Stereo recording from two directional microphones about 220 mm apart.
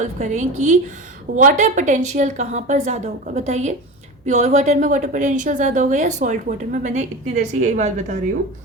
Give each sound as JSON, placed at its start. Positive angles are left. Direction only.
{"t": 0.0, "sound": "a woman's voice", "side_deg": -35}